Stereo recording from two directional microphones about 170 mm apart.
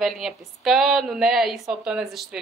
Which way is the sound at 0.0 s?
Centre (ahead or behind).